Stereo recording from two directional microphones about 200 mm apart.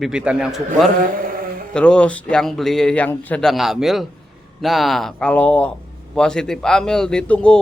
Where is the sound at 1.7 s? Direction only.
5° left (ahead or behind).